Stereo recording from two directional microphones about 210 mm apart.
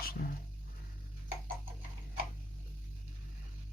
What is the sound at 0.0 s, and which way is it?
Music, 45° left (ahead or behind).